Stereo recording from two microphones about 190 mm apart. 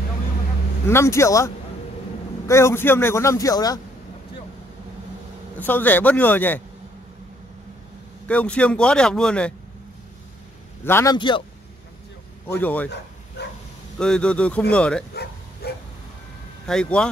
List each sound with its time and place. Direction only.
0.8 s a man's voice: 15° left (ahead or behind)
5.6 s a man's voice: 10° left (ahead or behind)
8.3 s speech: 5° left (ahead or behind)
10.8 s a man's voice: 10° left (ahead or behind)
11.1 s a man's voice: 25° left (ahead or behind)
12.5 s a man's voice: 10° left (ahead or behind)
13.9 s speech: 5° left (ahead or behind)
15.6 s dog: 55° left (ahead or behind)
16.6 s speech: 5° left (ahead or behind)